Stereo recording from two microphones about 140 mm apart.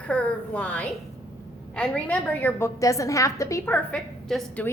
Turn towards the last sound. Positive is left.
turn(degrees=0)  # may be behind; listen again after turning